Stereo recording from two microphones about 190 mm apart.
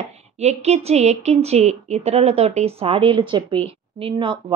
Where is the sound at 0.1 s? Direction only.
35° right (ahead or behind).